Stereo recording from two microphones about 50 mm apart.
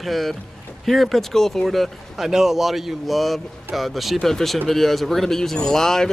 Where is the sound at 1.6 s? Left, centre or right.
Centre.